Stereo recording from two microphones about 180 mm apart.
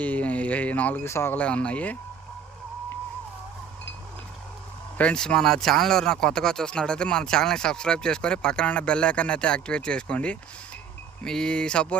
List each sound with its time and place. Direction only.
0.0 s speech: 10° left (ahead or behind)
4.9 s speech: 5° left (ahead or behind)